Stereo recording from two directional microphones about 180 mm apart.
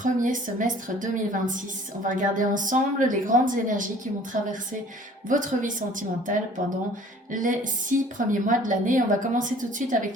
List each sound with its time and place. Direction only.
0.0 s a woman's voice: 45° right (ahead or behind)
5.3 s a woman's voice: 45° right (ahead or behind)